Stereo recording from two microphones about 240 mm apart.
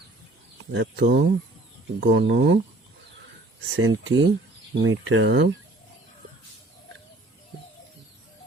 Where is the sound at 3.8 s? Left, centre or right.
Right.